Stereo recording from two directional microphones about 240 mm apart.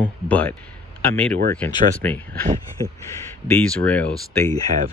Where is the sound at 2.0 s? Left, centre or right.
Centre.